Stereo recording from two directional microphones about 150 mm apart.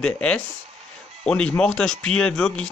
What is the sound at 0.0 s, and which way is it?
Speech, 5° left (ahead or behind).